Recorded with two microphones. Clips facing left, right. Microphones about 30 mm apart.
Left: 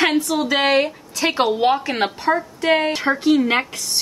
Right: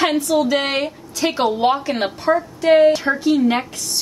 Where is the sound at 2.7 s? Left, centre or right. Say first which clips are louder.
Right 5 dB; left.